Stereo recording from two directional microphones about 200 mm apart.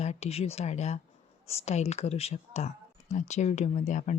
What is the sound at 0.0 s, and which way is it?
Speech, 30° left (ahead or behind).